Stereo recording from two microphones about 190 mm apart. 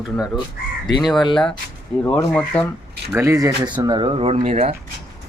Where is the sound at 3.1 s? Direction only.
15° right (ahead or behind); by 4.7 s 35° right (ahead or behind).